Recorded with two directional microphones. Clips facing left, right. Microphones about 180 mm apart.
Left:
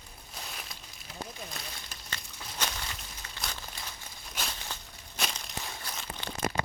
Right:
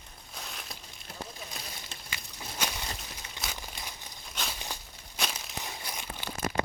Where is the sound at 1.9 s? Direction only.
25° right (ahead or behind).